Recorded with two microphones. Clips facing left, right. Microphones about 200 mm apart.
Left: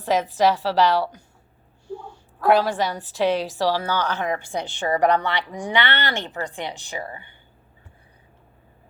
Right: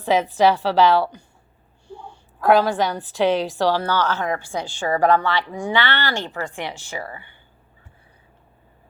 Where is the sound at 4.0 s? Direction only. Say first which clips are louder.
Right 2 dB; 15° left (ahead or behind).